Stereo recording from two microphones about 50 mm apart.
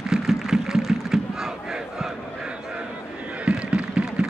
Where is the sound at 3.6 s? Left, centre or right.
Right.